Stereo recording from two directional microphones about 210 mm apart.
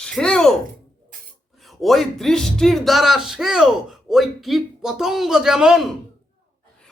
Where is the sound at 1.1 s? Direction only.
40° right (ahead or behind).